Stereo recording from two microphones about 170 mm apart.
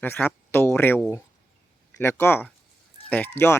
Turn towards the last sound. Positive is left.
turn(degrees=15)  # may be behind; listen again after turning